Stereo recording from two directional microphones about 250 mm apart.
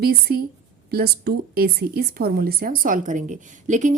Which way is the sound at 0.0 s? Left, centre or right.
Right.